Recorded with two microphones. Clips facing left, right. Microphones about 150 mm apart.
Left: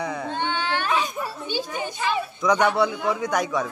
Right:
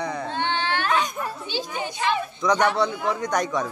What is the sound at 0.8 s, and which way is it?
Wail, 10° left (ahead or behind).